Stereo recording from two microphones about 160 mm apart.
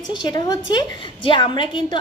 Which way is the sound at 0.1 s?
25° left (ahead or behind).